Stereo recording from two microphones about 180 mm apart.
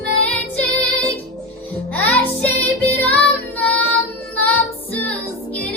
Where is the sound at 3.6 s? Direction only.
5° left (ahead or behind).